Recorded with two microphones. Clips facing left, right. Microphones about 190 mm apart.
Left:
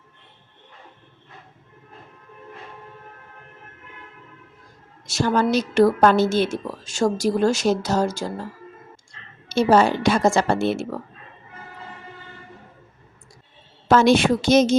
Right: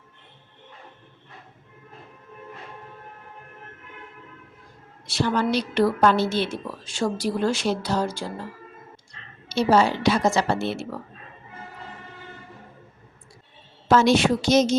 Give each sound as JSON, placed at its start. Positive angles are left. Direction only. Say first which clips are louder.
{"t": 5.0, "sound": "a woman's voice", "louder": "left 3 dB", "side_deg": 45}
{"t": 9.5, "sound": "a woman's voice", "louder": "left 3 dB", "side_deg": 50}
{"t": 13.8, "sound": "a woman's voice", "louder": "left 2 dB", "side_deg": 55}